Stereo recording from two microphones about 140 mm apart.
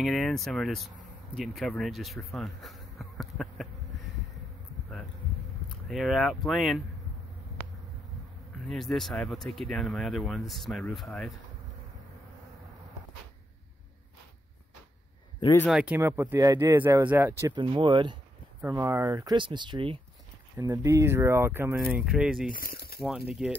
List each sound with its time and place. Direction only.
0.0 s speech: centre (ahead or behind)
5.7 s speech: centre (ahead or behind)
7.6 s a sound: 15° left (ahead or behind)
8.6 s speech: 5° left (ahead or behind)
15.7 s speech: 10° right (ahead or behind)
17.5 s speech: 35° right (ahead or behind)
18.6 s speech: 20° right (ahead or behind)
19.3 s speech: 35° right (ahead or behind); by 22.5 s 5° right (ahead or behind)
22.5 s speech: 90° left
23.0 s speech: centre (ahead or behind)